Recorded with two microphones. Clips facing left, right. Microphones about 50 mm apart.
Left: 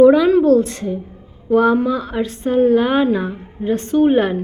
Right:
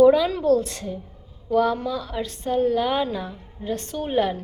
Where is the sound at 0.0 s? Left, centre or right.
Centre.